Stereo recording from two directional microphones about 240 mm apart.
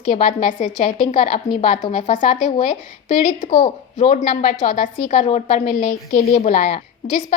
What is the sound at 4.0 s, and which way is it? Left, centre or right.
A woman's voice, left.